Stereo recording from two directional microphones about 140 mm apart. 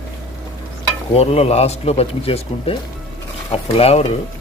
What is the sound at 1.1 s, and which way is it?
Speech, 45° left (ahead or behind).